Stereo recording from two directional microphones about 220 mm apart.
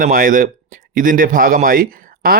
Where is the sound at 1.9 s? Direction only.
40° right (ahead or behind).